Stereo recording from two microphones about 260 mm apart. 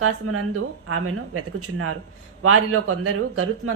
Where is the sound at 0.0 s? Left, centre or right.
Right.